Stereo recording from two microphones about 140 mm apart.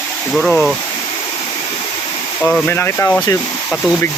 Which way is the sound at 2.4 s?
10° left (ahead or behind).